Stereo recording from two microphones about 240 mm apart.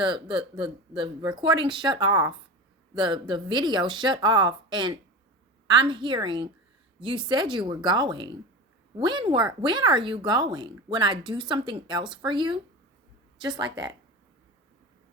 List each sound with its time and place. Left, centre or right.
0.0 s a woman's voice: centre
13.6 s a woman's voice: centre